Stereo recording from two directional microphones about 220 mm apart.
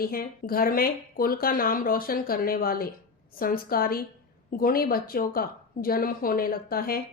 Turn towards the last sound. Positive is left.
turn(degrees=40)  # may be behind; listen again after turning